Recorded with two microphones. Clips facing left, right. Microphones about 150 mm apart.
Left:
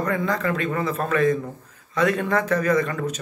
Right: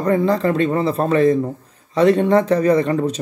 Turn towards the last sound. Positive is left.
turn(degrees=-30)  # may be behind; listen again after turning